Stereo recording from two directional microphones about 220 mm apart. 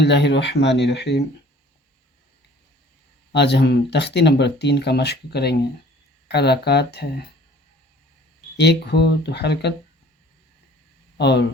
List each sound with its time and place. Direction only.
0.0 s speech: 50° left (ahead or behind)
3.3 s speech: 50° left (ahead or behind)
8.5 s speech: 50° left (ahead or behind)
11.2 s speech: 50° left (ahead or behind)